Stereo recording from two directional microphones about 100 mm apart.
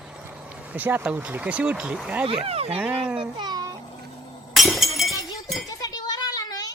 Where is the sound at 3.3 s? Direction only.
45° right (ahead or behind).